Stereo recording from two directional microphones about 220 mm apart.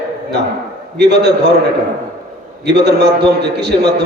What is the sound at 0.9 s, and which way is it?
Speech, 50° right (ahead or behind).